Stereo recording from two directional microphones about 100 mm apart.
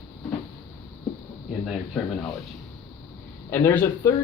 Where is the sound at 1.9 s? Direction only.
Centre (ahead or behind).